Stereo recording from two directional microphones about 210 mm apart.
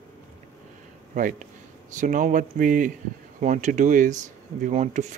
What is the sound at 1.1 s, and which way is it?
Speech, 40° right (ahead or behind).